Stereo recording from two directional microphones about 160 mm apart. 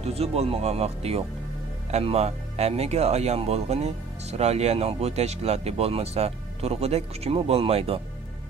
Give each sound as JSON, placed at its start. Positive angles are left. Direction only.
{"t": 0.0, "sound": "speech", "side_deg": -40}